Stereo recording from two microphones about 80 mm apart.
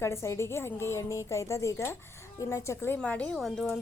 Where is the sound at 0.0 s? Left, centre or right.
Left.